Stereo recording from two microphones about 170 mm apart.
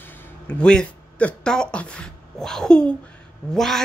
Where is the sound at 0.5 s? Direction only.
5° left (ahead or behind).